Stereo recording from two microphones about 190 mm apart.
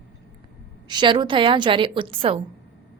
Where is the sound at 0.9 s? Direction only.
25° right (ahead or behind).